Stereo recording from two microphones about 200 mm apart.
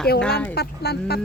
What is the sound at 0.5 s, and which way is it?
Speech, 55° left (ahead or behind).